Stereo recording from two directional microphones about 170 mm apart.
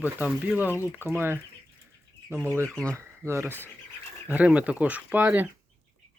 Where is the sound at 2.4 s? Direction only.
15° right (ahead or behind).